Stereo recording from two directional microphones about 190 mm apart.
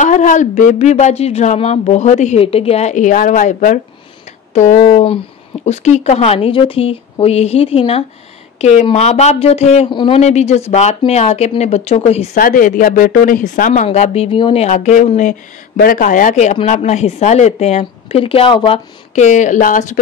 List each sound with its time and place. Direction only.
0.0 s speech: 40° left (ahead or behind)
12.4 s speech: 45° left (ahead or behind); by 18.8 s 25° left (ahead or behind)
19.1 s speech: 40° left (ahead or behind)